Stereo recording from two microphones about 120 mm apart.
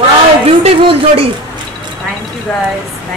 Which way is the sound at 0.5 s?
50° right (ahead or behind).